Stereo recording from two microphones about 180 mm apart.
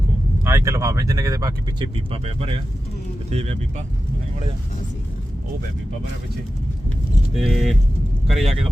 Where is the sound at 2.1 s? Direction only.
35° right (ahead or behind).